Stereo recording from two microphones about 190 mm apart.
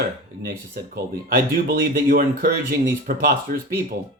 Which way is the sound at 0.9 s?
50° right (ahead or behind).